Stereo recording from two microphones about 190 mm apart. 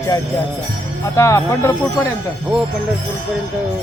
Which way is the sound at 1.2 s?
15° left (ahead or behind).